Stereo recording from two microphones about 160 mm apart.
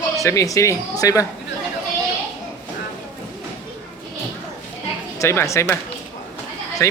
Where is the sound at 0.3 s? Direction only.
20° left (ahead or behind).